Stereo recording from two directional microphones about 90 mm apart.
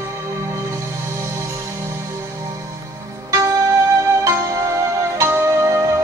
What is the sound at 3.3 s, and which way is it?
Music, 35° right (ahead or behind).